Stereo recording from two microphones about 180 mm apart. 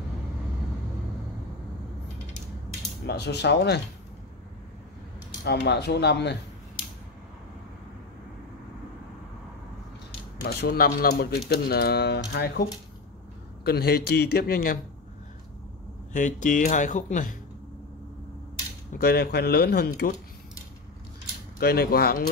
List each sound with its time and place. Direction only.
3.1 s speech: 70° left (ahead or behind)
5.4 s speech: 70° left (ahead or behind)
10.4 s speech: 60° left (ahead or behind)
13.7 s speech: 60° left (ahead or behind)
16.1 s speech: 45° left (ahead or behind)
18.9 s speech: 65° left (ahead or behind)
21.5 s speech: 60° left (ahead or behind)